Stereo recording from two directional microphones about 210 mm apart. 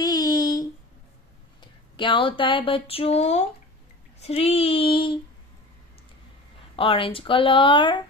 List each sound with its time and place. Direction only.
0.0 s a sound: 20° left (ahead or behind)
1.6 s speech: 25° left (ahead or behind)
6.8 s speech: 25° left (ahead or behind)